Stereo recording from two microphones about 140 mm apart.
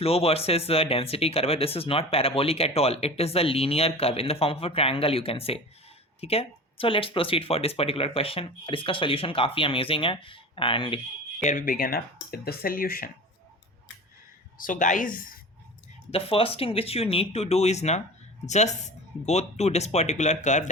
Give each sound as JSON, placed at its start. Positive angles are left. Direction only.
{"t": 0.0, "sound": "speech", "side_deg": 45}
{"t": 11.4, "sound": "speech", "side_deg": 75}
{"t": 14.6, "sound": "a woman's voice", "side_deg": 70}
{"t": 16.1, "sound": "speech", "side_deg": 40}